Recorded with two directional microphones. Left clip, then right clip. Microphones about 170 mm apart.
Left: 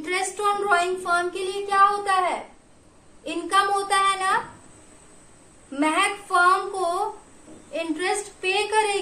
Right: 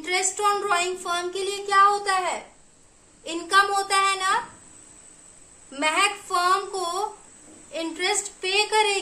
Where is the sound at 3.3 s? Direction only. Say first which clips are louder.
Right 1 dB; 40° right (ahead or behind).